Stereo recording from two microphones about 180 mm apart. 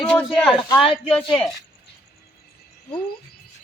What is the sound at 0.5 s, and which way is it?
Speech, 30° left (ahead or behind).